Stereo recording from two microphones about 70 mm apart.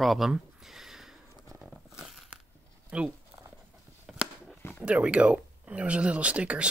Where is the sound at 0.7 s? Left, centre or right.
Centre.